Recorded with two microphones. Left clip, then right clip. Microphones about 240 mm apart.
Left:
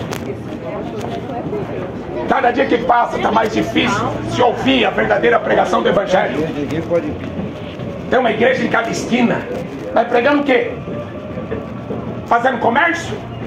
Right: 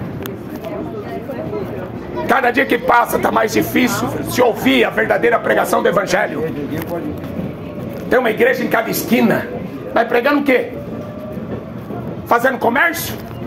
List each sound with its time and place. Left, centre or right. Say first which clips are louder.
2.2 s speech: even; right
8.1 s speech: even; right
12.3 s speech: even; right